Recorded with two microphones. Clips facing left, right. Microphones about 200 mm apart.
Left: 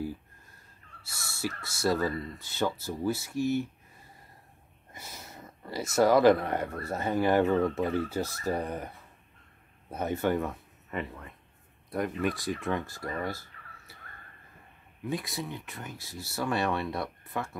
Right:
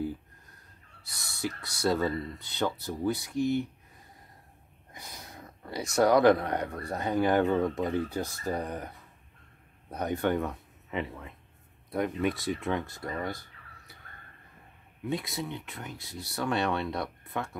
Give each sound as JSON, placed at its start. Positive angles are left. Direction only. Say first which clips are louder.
{"t": 1.1, "sound": "speech", "louder": "left 2 dB", "side_deg": -20}
{"t": 1.4, "sound": "speech", "louder": "even", "side_deg": 5}
{"t": 4.9, "sound": "a sound", "louder": "even", "side_deg": 5}
{"t": 5.9, "sound": "speech", "louder": "even", "side_deg": 5}
{"t": 9.8, "sound": "speech", "louder": "even", "side_deg": 5}
{"t": 13.0, "sound": "a sound", "louder": "even", "side_deg": 0}
{"t": 15.0, "sound": "speech", "louder": "right 1 dB", "side_deg": 0}